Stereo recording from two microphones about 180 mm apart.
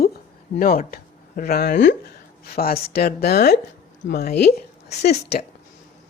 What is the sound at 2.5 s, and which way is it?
Speech, 55° left (ahead or behind).